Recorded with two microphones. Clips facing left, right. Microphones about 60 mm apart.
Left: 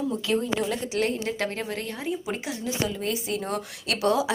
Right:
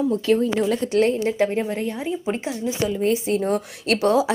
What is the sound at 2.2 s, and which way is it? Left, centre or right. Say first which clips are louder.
A woman's voice: right 6 dB; right.